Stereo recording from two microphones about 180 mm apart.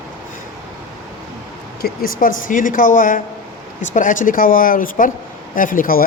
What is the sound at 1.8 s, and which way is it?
Speech, 55° left (ahead or behind).